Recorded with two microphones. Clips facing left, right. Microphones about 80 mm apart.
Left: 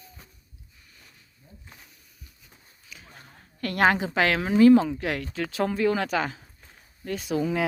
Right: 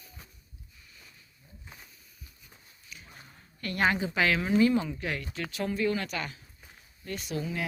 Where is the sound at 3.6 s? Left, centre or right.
Left.